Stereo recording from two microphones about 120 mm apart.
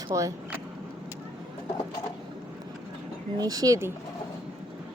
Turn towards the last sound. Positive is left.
turn(degrees=-30)  # may be behind; listen again after turning